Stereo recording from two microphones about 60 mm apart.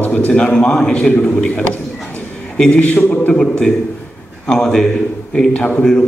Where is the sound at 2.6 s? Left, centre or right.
Centre.